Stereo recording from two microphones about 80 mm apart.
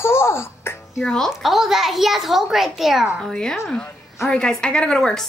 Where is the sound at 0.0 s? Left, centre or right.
Left.